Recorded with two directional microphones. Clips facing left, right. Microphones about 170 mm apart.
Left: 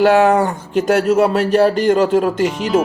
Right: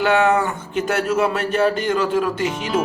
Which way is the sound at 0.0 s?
40° left (ahead or behind).